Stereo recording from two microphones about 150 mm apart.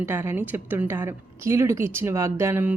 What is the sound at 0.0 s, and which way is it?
A woman's voice, 15° right (ahead or behind).